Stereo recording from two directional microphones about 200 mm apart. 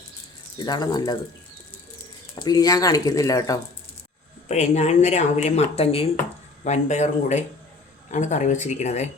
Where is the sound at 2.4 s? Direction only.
20° left (ahead or behind).